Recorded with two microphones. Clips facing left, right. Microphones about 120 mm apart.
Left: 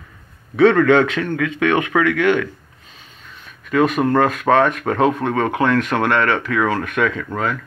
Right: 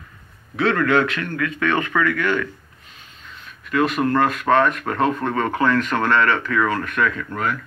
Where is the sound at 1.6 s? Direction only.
65° left (ahead or behind).